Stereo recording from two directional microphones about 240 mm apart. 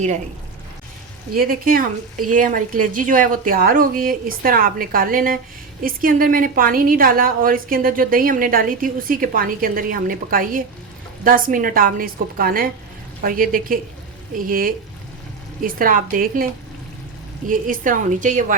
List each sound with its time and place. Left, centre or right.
1.4 s a woman's voice: right
17.5 s a woman's voice: right